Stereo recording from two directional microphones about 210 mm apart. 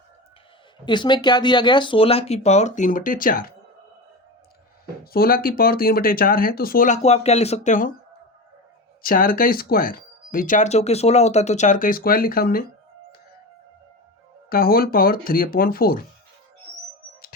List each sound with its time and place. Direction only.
0.9 s speech: 20° left (ahead or behind); by 3.5 s 40° left (ahead or behind)
5.1 s speech: 45° left (ahead or behind)
9.0 s speech: 45° left (ahead or behind)
14.5 s speech: 45° left (ahead or behind)